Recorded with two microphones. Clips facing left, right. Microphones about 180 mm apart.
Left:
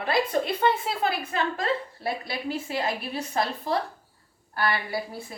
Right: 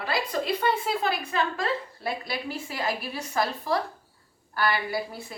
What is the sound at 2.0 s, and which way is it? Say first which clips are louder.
A woman's voice: left 1 dB; 25° left (ahead or behind).